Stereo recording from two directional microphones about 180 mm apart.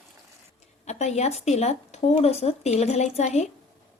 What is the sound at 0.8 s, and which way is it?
Speech, 40° left (ahead or behind).